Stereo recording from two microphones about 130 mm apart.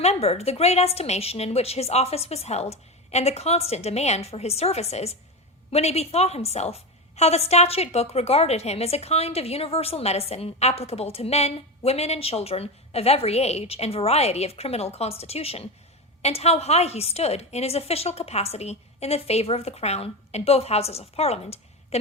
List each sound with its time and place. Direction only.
0.0 s a woman's voice: 55° left (ahead or behind)